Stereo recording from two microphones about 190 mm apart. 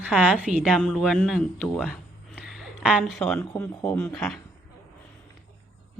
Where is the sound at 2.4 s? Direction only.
Centre (ahead or behind).